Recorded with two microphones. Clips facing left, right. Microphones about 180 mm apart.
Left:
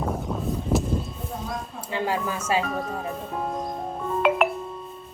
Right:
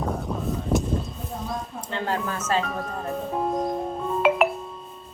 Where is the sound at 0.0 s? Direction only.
Centre (ahead or behind).